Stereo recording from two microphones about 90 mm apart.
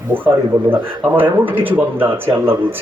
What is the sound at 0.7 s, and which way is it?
A man's voice, 20° right (ahead or behind).